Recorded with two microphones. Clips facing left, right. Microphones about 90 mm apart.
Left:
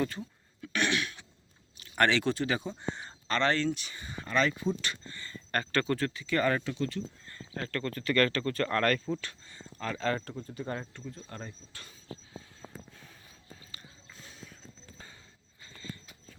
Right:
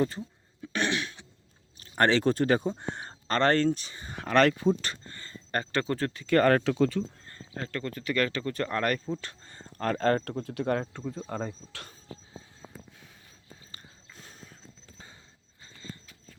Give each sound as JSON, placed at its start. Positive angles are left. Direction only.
{"t": 0.6, "sound": "cough", "side_deg": -30}
{"t": 1.8, "sound": "speech", "side_deg": -35}
{"t": 2.7, "sound": "speech", "side_deg": -60}
{"t": 3.2, "sound": "speech", "side_deg": -45}
{"t": 4.1, "sound": "speech", "side_deg": -70}
{"t": 4.8, "sound": "speech", "side_deg": -40}
{"t": 5.3, "sound": "speech", "side_deg": -20}
{"t": 6.1, "sound": "speech", "side_deg": -50}
{"t": 7.5, "sound": "speech", "side_deg": -20}
{"t": 9.5, "sound": "speech", "side_deg": -50}
{"t": 10.3, "sound": "speech", "side_deg": -75}
{"t": 14.2, "sound": "horse", "side_deg": -50}